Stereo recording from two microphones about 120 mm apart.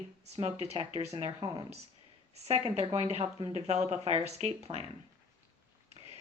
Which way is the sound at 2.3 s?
60° right (ahead or behind).